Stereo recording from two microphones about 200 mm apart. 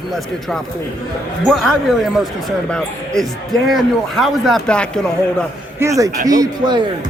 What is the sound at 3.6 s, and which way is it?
A man's voice, centre (ahead or behind).